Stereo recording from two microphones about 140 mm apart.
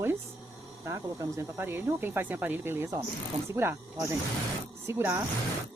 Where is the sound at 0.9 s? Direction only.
20° right (ahead or behind).